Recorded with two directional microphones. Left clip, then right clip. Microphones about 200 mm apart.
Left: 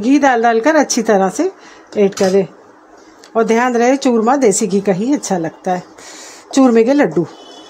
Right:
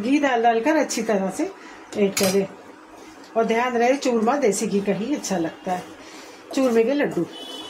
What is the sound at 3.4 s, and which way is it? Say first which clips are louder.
Speech: left 7 dB; 55° left (ahead or behind).